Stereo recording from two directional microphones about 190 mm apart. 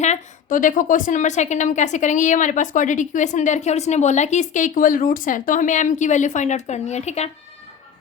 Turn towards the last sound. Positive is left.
turn(degrees=35)  # may be behind; listen again after turning